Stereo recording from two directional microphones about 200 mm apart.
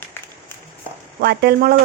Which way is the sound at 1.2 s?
55° right (ahead or behind).